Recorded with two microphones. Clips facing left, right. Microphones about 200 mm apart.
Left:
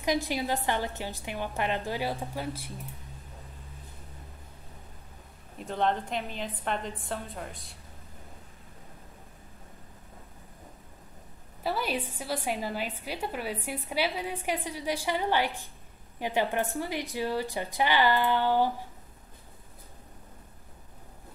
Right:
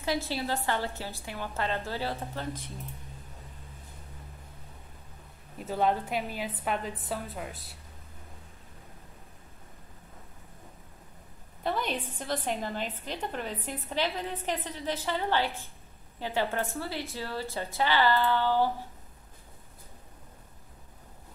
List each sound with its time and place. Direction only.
0.0 s a woman's voice: 15° left (ahead or behind)
5.6 s a woman's voice: 5° right (ahead or behind)
11.6 s a woman's voice: 5° left (ahead or behind)